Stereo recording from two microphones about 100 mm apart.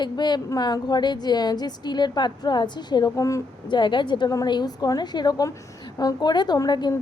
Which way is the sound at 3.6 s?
50° left (ahead or behind).